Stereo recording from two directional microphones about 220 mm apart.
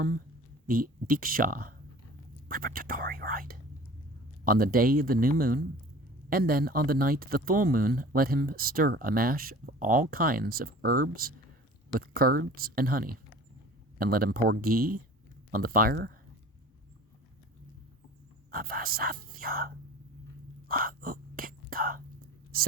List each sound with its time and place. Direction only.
0.7 s speech: 40° right (ahead or behind)
18.5 s speech: 40° right (ahead or behind)
20.7 s whispering: 40° right (ahead or behind)